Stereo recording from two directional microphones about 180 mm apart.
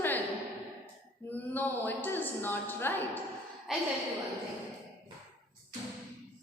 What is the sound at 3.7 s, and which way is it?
Speech, centre (ahead or behind).